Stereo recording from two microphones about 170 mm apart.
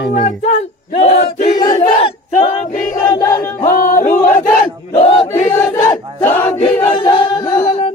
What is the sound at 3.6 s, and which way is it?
Chant, 50° left (ahead or behind).